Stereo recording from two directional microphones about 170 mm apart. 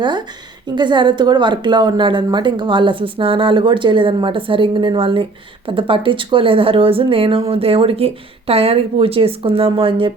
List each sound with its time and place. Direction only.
0.0 s a woman's voice: 25° right (ahead or behind)